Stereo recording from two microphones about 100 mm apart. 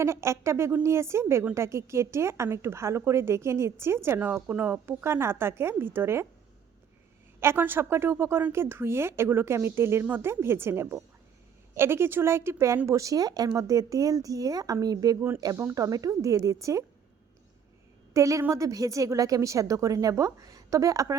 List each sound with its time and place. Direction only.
0.0 s speech: 30° right (ahead or behind)
7.3 s speech: 25° right (ahead or behind)
18.1 s speech: 30° right (ahead or behind)